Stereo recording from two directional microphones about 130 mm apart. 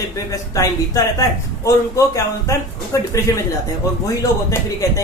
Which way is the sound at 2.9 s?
25° left (ahead or behind).